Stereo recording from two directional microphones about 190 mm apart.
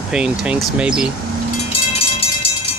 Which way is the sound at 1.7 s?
30° left (ahead or behind).